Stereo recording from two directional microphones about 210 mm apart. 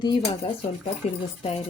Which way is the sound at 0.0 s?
25° left (ahead or behind).